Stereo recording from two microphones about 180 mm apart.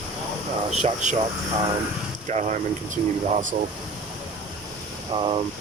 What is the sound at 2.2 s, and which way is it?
Speech, 40° right (ahead or behind).